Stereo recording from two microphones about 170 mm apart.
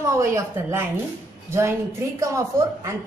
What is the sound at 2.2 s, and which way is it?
Speech, 20° right (ahead or behind).